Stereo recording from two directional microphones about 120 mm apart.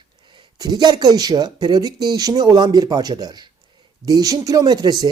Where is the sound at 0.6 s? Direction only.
35° right (ahead or behind).